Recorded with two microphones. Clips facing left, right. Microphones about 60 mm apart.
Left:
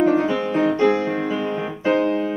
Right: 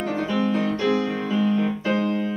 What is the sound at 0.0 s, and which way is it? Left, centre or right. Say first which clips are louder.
Music: left 6 dB; left.